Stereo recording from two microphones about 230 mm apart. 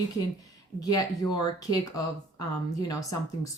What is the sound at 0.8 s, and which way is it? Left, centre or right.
Speech, centre.